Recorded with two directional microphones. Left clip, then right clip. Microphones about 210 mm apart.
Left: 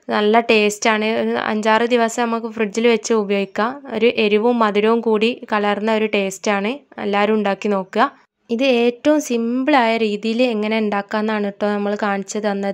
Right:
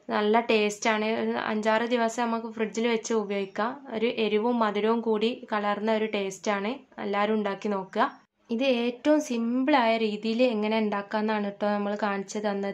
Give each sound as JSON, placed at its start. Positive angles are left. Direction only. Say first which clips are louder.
{"t": 0.1, "sound": "speech", "louder": "left 9 dB", "side_deg": 35}